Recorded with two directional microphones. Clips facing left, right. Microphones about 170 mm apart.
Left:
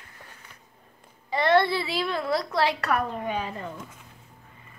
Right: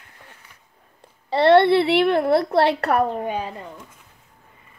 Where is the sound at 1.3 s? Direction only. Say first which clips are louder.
Right 7 dB; 70° right (ahead or behind).